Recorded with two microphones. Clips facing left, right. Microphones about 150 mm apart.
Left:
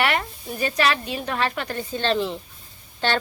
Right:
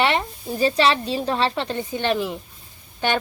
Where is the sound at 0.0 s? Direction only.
25° right (ahead or behind).